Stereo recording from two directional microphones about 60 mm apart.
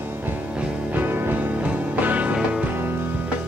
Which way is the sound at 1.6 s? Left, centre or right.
Right.